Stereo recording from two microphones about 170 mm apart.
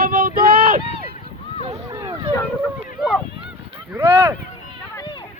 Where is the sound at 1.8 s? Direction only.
20° right (ahead or behind).